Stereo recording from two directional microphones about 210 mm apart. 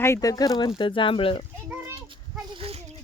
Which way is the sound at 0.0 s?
15° left (ahead or behind).